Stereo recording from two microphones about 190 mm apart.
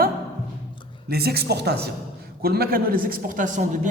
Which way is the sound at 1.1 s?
55° right (ahead or behind).